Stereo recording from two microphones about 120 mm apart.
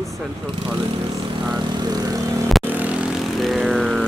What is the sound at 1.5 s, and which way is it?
Speech, 35° right (ahead or behind).